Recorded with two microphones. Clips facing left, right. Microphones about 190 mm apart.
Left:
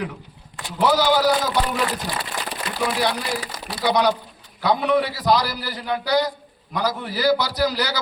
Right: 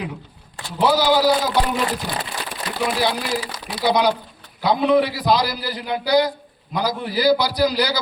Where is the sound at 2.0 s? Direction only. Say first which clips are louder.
Right 1 dB; 60° right (ahead or behind).